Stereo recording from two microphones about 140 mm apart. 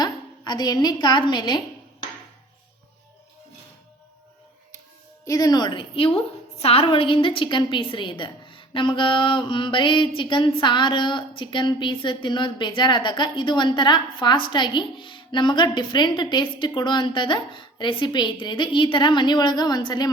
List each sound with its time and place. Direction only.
0.0 s a woman's voice: 30° left (ahead or behind)
5.2 s a woman's voice: 25° left (ahead or behind)